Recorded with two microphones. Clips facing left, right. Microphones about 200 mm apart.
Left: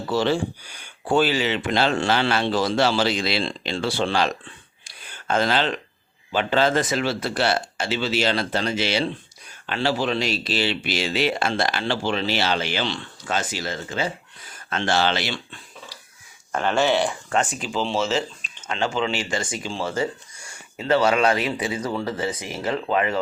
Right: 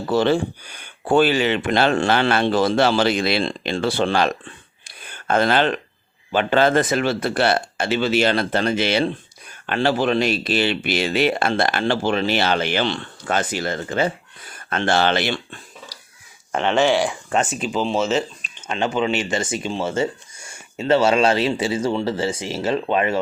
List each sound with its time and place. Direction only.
0.1 s speech: 55° right (ahead or behind)
16.6 s speech: 10° right (ahead or behind)